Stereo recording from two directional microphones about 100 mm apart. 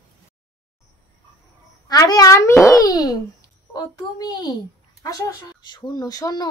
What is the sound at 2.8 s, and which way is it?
A child's voice, 40° left (ahead or behind).